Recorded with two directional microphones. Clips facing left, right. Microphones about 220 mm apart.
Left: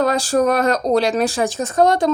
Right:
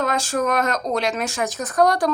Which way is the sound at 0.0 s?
35° left (ahead or behind).